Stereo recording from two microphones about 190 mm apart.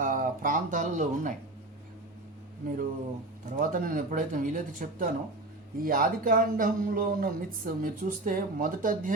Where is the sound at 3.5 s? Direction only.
45° right (ahead or behind).